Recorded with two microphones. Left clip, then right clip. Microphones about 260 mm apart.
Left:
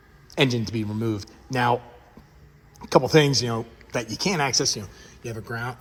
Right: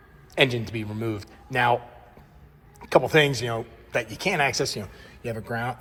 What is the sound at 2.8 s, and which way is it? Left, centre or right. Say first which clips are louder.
Speech: left 1 dB; centre.